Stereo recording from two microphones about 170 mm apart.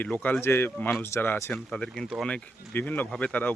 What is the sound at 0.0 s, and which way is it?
Speech, 10° left (ahead or behind).